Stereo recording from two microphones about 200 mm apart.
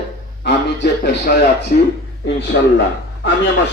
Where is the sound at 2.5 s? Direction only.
50° left (ahead or behind).